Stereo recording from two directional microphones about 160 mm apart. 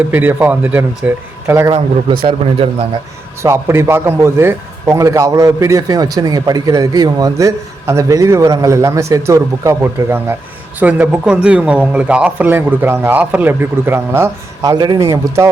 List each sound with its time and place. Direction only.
0.1 s speech: 10° right (ahead or behind)
2.2 s speech: 35° right (ahead or behind)
3.4 s a man's voice: 15° right (ahead or behind)